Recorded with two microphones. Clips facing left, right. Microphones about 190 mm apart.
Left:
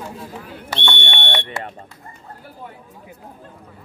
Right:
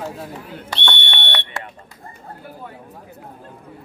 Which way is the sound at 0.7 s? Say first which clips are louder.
Left 2 dB; 50° left (ahead or behind).